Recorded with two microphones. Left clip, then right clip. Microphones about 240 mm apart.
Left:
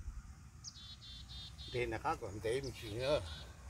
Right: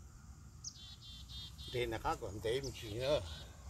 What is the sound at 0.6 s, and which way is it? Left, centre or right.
Insect, right.